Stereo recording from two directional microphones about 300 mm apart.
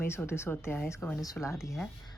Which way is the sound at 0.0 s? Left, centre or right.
Centre.